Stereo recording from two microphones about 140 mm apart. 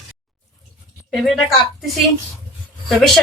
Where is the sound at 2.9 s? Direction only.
Centre (ahead or behind).